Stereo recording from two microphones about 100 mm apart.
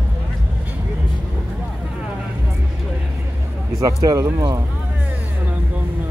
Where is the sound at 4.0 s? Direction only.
35° right (ahead or behind).